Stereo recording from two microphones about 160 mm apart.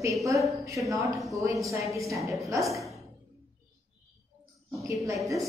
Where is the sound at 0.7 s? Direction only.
Centre (ahead or behind).